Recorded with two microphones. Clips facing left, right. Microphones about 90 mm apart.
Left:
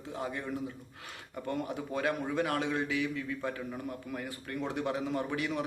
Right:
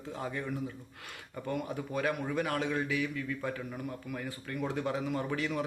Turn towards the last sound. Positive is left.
turn(degrees=20)  # may be behind; listen again after turning